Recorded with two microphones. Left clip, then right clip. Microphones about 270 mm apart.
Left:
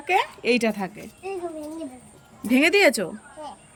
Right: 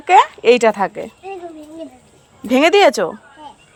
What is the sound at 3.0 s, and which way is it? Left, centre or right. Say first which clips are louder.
Speech: right 10 dB; right.